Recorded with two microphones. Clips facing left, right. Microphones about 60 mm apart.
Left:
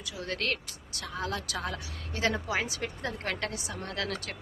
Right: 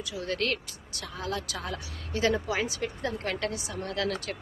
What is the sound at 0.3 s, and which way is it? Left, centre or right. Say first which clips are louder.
Speech: right 2 dB; left.